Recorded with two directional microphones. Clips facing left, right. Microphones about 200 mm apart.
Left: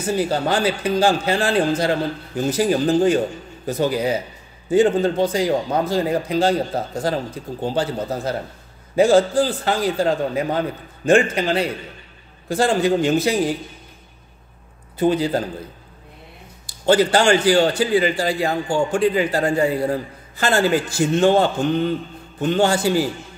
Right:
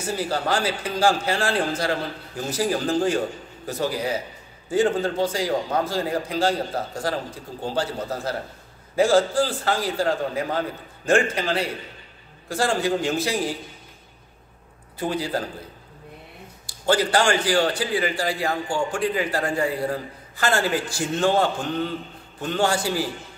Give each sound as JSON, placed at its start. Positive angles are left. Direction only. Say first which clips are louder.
{"t": 0.2, "sound": "a man's voice", "louder": "left 3 dB", "side_deg": 20}
{"t": 15.0, "sound": "a man's voice", "louder": "left 7 dB", "side_deg": 20}
{"t": 16.6, "sound": "a man's voice", "louder": "left 5 dB", "side_deg": 25}